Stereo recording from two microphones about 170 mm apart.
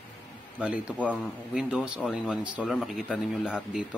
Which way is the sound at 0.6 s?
5° right (ahead or behind).